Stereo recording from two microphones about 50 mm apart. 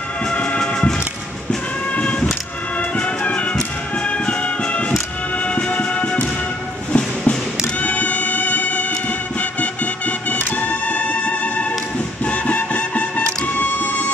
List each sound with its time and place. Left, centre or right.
0.3 s music: left
2.0 s music: left